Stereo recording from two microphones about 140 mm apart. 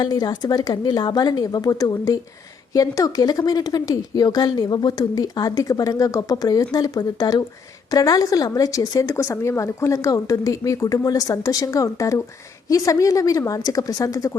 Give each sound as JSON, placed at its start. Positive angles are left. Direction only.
{"t": 0.0, "sound": "speech", "side_deg": 30}